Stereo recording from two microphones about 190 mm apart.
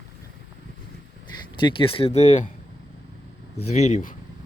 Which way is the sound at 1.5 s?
25° left (ahead or behind).